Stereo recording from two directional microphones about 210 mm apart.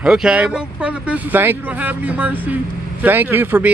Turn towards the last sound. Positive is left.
turn(degrees=-10)  # may be behind; listen again after turning